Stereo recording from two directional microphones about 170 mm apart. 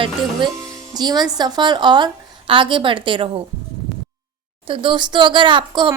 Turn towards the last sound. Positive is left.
turn(degrees=-30)  # may be behind; listen again after turning